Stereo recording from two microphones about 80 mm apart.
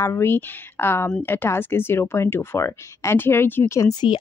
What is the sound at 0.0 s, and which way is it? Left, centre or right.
Speech, left.